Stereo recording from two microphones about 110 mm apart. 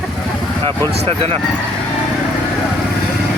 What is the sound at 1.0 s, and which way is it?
Speech, 60° right (ahead or behind).